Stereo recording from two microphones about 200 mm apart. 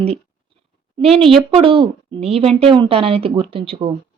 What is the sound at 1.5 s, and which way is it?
A woman's voice, 25° right (ahead or behind).